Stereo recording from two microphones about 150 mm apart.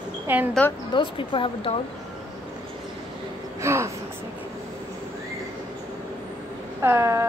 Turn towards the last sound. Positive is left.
turn(degrees=-20)  # may be behind; listen again after turning